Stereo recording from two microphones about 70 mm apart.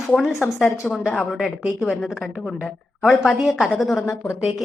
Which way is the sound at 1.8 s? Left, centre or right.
Centre.